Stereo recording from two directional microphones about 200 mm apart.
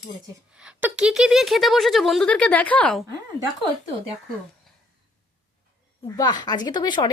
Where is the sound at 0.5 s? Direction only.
5° right (ahead or behind).